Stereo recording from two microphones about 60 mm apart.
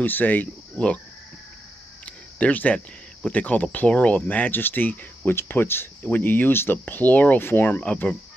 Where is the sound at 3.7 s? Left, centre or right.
Left.